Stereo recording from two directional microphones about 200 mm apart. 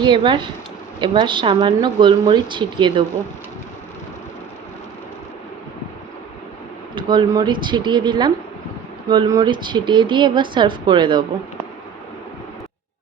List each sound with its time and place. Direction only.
0.0 s a woman's voice: 25° right (ahead or behind)
6.9 s a woman's voice: 25° right (ahead or behind)